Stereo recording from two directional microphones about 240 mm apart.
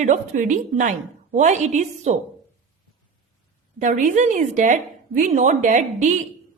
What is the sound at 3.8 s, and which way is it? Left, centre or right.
A woman's voice, right.